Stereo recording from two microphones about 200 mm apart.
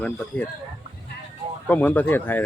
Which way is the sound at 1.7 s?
10° left (ahead or behind).